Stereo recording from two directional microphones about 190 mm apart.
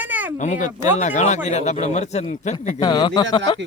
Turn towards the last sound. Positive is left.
turn(degrees=20)  # may be behind; listen again after turning